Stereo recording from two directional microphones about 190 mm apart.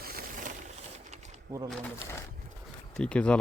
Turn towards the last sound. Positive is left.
turn(degrees=5)  # may be behind; listen again after turning